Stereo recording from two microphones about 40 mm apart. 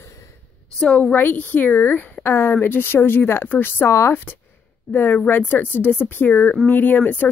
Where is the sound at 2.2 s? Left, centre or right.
Left.